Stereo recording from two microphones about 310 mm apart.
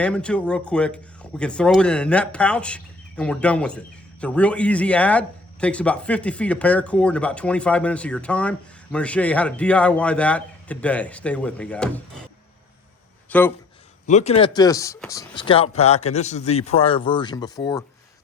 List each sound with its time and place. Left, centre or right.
0.0 s speech: centre
13.3 s speech: centre
14.1 s a man's voice: left